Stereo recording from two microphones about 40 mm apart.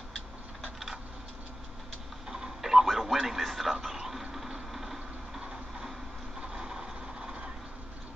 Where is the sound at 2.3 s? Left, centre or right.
Centre.